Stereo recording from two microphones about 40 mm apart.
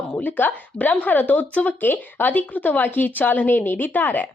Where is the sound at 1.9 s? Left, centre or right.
Left.